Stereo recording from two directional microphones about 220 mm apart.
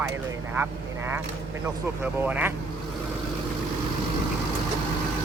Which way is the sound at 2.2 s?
10° right (ahead or behind).